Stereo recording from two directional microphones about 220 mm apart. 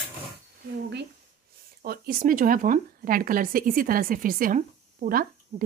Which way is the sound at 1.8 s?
45° right (ahead or behind).